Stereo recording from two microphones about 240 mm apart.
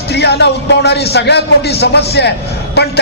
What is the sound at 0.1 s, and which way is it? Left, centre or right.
A man's voice, left.